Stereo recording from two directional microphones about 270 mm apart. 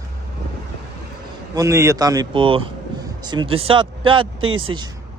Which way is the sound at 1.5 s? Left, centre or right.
Centre.